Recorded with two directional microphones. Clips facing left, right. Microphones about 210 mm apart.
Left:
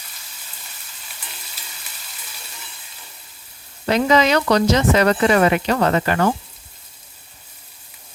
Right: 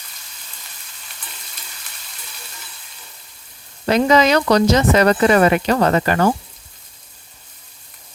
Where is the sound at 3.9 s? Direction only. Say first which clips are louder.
Right 2 dB; 45° right (ahead or behind).